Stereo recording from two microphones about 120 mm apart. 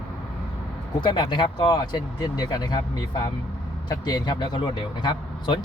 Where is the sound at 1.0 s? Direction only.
40° left (ahead or behind).